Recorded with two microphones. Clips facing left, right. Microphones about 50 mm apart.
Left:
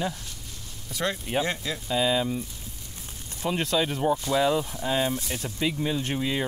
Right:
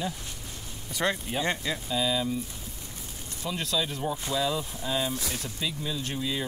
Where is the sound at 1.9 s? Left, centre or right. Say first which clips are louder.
Left 4 dB; left.